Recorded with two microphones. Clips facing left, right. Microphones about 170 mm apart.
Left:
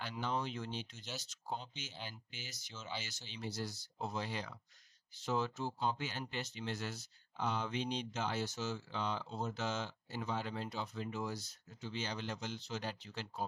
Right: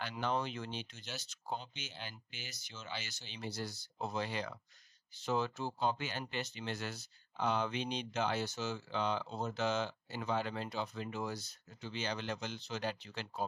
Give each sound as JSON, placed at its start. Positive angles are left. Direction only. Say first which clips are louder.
{"t": 0.0, "sound": "speech", "louder": "right 2 dB", "side_deg": -65}